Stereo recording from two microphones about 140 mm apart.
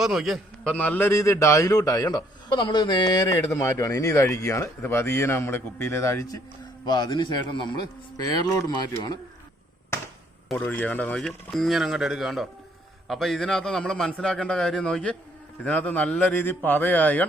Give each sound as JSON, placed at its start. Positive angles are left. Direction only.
{"t": 0.0, "sound": "a man's voice", "side_deg": 0}
{"t": 10.6, "sound": "a man's voice", "side_deg": 10}